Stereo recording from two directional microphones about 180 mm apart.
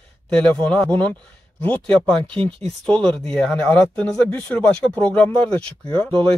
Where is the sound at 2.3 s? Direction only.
30° right (ahead or behind).